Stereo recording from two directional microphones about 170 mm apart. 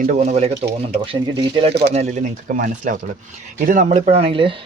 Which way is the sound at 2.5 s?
50° right (ahead or behind).